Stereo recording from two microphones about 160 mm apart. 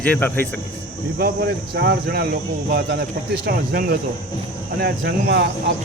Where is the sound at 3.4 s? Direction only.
75° right (ahead or behind).